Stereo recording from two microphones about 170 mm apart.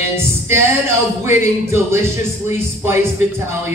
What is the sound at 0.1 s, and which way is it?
Music, 15° right (ahead or behind).